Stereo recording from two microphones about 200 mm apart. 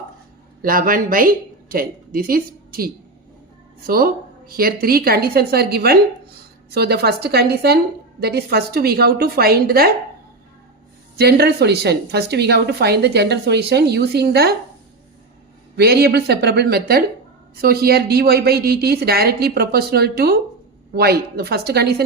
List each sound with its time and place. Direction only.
0.6 s speech: 45° right (ahead or behind)
11.2 s a woman's voice: 55° right (ahead or behind)
15.7 s speech: 50° right (ahead or behind)